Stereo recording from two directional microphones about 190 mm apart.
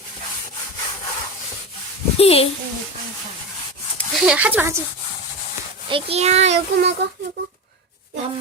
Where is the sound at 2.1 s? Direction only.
30° left (ahead or behind).